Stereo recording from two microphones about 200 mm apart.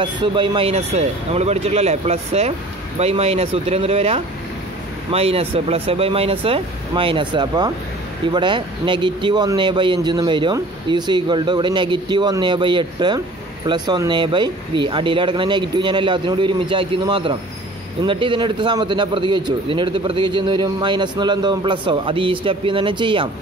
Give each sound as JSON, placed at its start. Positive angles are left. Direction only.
{"t": 0.0, "sound": "a man's voice", "side_deg": -25}